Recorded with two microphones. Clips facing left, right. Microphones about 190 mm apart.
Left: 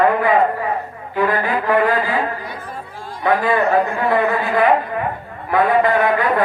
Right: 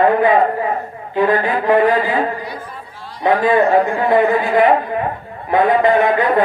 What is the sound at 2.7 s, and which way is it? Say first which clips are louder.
Chatter: left 3 dB; 45° left (ahead or behind).